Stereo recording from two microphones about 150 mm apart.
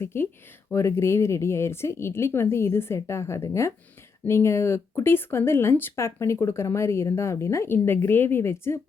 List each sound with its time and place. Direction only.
0.0 s speech: 15° left (ahead or behind)